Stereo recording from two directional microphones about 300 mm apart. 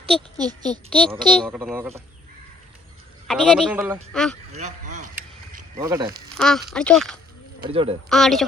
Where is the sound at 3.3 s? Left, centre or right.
Centre.